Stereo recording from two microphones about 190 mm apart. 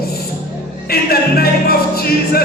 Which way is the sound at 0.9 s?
55° left (ahead or behind).